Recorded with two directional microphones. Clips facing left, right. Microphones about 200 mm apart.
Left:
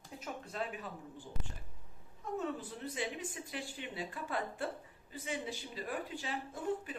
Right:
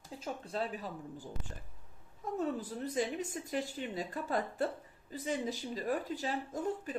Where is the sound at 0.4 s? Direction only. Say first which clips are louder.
Right 4 dB; 35° right (ahead or behind).